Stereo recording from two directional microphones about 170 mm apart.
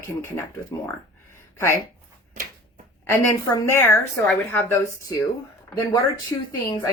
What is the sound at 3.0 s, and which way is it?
A woman's voice, 20° left (ahead or behind).